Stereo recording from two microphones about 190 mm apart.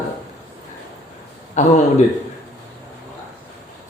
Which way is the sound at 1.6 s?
40° left (ahead or behind).